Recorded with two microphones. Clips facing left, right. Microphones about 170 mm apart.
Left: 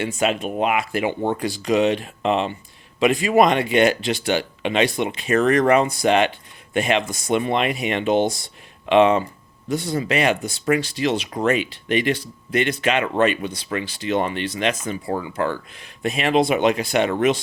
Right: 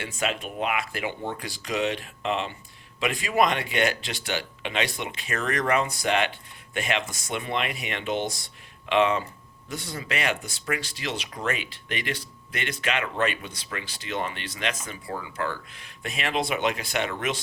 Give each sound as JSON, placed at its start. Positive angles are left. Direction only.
{"t": 0.0, "sound": "speech", "side_deg": 20}